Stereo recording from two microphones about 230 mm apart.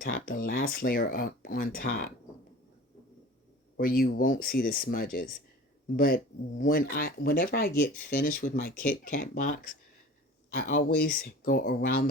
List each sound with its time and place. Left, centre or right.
0.0 s speech: left
3.8 s speech: left